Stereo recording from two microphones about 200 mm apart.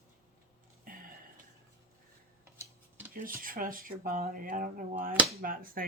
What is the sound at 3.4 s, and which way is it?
Speech, 45° right (ahead or behind).